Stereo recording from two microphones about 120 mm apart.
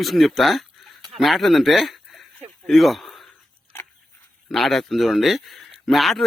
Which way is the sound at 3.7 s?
20° left (ahead or behind).